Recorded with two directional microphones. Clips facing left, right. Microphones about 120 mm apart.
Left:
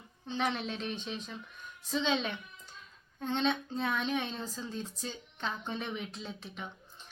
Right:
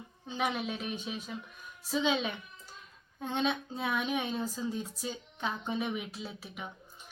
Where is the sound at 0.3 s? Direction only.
10° right (ahead or behind).